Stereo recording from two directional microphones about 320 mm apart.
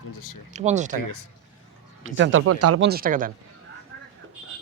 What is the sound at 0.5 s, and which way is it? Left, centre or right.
Speech, right.